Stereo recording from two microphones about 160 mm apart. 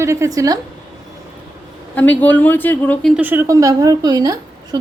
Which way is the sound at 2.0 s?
10° left (ahead or behind).